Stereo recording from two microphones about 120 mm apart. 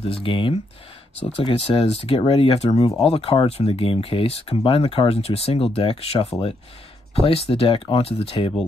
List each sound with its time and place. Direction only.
0.0 s speech: 50° left (ahead or behind)